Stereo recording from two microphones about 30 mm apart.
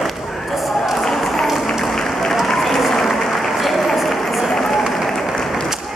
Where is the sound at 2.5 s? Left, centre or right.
Centre.